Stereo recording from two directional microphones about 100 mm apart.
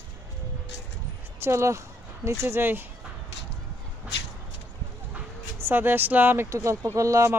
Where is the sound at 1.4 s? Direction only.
30° right (ahead or behind).